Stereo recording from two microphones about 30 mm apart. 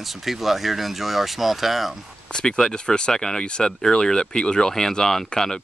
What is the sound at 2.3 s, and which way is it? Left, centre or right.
Speech, left.